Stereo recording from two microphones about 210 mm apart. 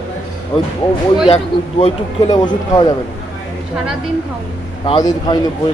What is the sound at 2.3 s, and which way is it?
Speech, 20° left (ahead or behind).